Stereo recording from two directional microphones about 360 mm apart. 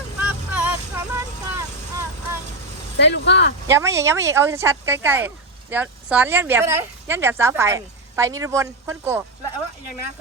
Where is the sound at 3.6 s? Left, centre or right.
Centre.